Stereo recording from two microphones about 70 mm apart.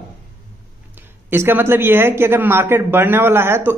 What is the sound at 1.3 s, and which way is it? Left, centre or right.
Speech, right.